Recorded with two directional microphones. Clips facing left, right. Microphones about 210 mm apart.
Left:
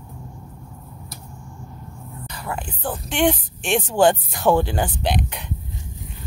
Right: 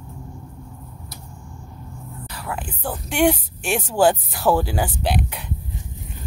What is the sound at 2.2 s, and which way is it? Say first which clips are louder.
A woman's voice: even; 5° right (ahead or behind).